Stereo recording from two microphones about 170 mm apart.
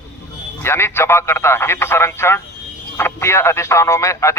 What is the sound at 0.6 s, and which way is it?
Speech, 15° left (ahead or behind).